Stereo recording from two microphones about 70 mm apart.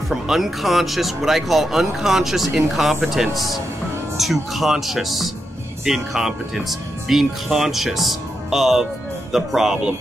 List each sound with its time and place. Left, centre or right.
0.1 s speech: centre